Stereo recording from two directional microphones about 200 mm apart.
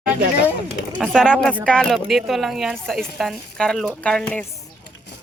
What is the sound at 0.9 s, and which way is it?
Speech, centre (ahead or behind).